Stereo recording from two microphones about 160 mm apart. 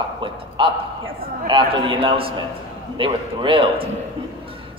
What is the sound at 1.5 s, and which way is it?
A man's voice, 30° right (ahead or behind).